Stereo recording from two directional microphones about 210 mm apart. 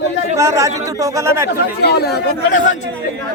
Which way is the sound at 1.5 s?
50° left (ahead or behind).